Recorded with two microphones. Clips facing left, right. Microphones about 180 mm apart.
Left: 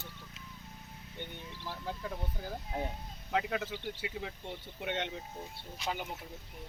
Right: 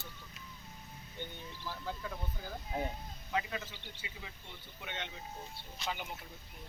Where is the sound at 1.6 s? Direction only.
30° left (ahead or behind).